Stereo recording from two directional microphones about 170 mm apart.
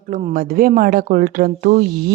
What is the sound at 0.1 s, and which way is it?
Speech, 45° right (ahead or behind).